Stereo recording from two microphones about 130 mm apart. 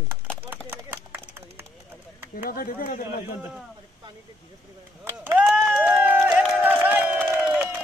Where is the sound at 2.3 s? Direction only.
90° left.